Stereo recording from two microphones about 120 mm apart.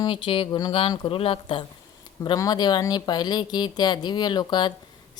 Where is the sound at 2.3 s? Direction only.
30° left (ahead or behind).